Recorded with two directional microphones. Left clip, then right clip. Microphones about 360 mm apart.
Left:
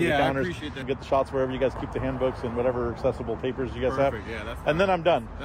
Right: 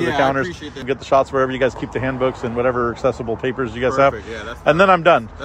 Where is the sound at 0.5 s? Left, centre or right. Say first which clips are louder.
Right 4 dB; centre.